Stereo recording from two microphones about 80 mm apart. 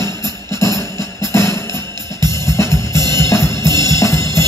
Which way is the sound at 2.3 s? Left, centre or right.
Left.